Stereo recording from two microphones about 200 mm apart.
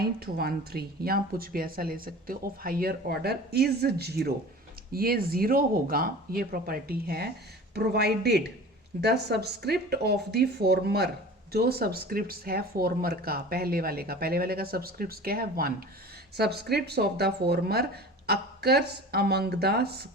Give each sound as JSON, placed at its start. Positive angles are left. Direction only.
{"t": 0.0, "sound": "speech", "side_deg": -50}